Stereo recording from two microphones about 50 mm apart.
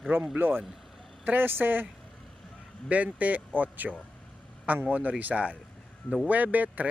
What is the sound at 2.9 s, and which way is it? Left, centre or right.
Speech, right.